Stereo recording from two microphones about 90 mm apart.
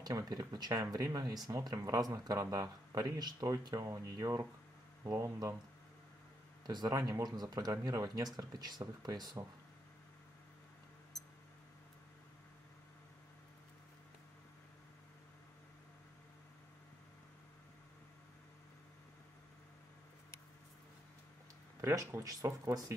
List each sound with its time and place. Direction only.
0.0 s speech: 45° right (ahead or behind)
3.7 s speech: 35° right (ahead or behind)
6.6 s speech: 50° right (ahead or behind)
6.9 s speech: 40° right (ahead or behind)
21.8 s speech: 35° right (ahead or behind)